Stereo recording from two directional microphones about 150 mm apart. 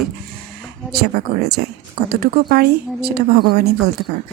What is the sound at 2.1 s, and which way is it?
A woman's voice, 90° right.